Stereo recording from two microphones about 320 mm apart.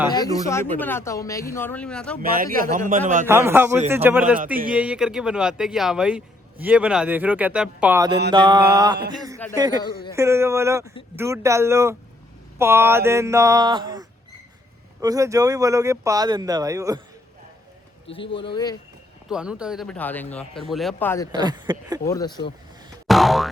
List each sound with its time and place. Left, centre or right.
0.1 s speech: centre
2.3 s a man's voice: right
3.2 s speech: centre
18.1 s speech: centre
19.3 s speech: centre
21.3 s speech: centre
22.0 s speech: centre
23.0 s boing: centre